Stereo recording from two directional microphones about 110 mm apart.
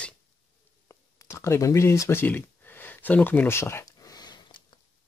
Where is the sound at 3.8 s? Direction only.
35° left (ahead or behind).